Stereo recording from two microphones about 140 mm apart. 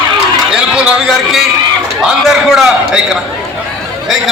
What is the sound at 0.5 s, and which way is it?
A man's voice, 5° right (ahead or behind).